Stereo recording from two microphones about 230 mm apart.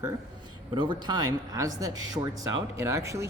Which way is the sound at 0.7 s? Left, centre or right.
Right.